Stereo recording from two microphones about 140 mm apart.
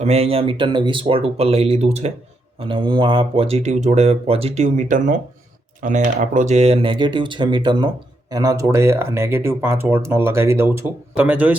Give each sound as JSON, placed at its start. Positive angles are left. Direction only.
{"t": 0.0, "sound": "speech", "side_deg": -45}
{"t": 2.6, "sound": "speech", "side_deg": -40}